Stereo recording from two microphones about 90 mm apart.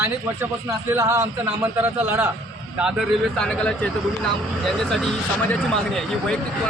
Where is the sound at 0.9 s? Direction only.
35° right (ahead or behind).